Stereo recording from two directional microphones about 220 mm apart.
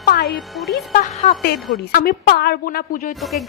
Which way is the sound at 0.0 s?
45° left (ahead or behind).